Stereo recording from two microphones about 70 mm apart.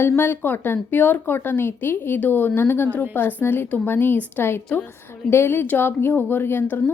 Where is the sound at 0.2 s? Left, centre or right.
Left.